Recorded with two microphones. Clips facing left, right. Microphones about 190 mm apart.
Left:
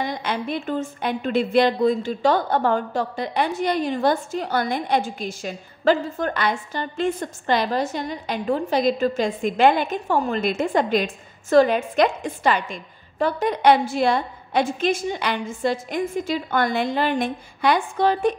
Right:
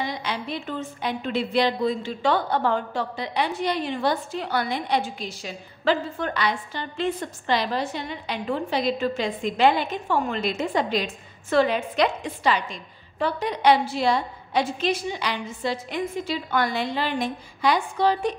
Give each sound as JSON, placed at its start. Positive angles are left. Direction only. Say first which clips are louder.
{"t": 0.0, "sound": "a woman's voice", "louder": "left 3 dB", "side_deg": 50}